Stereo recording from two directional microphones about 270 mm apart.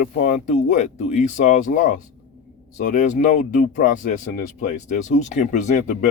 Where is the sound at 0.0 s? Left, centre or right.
Left.